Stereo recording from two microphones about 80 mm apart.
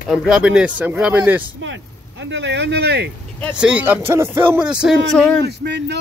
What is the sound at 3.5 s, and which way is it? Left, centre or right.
Speech, centre.